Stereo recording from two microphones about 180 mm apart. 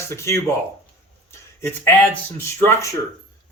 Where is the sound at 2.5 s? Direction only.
15° left (ahead or behind).